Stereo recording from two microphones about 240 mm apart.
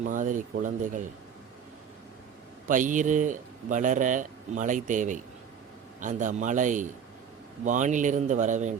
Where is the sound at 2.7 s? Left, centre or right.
Right.